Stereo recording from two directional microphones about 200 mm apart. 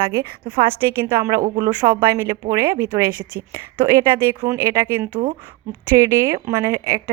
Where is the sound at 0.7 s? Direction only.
10° right (ahead or behind).